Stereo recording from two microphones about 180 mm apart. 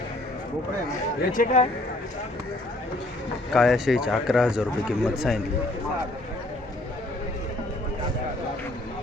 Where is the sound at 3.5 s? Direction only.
Centre (ahead or behind).